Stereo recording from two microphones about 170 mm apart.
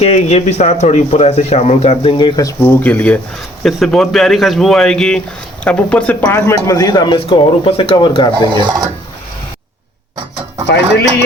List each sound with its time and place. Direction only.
0.0 s speech: 40° left (ahead or behind)
8.4 s speech: 30° right (ahead or behind)